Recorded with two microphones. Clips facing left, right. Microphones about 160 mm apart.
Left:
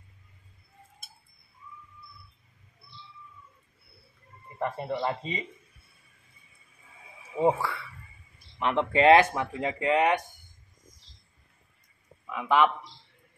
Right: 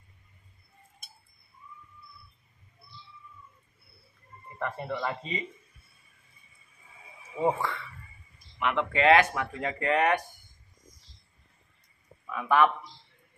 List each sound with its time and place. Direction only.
4.6 s speech: 20° left (ahead or behind)
7.4 s speech: 10° left (ahead or behind)
8.5 s speech: 30° left (ahead or behind)
12.3 s a man's voice: 20° left (ahead or behind)